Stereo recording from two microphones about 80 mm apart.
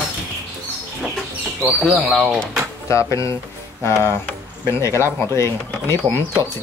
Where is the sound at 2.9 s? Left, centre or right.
Left.